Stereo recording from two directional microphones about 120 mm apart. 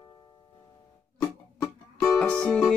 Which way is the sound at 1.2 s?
30° left (ahead or behind).